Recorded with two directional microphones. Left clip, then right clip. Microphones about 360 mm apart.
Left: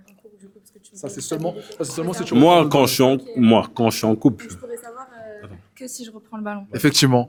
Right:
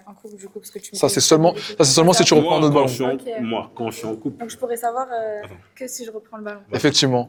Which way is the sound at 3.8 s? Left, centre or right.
Left.